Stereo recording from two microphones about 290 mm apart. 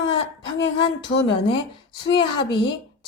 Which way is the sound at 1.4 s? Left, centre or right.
Centre.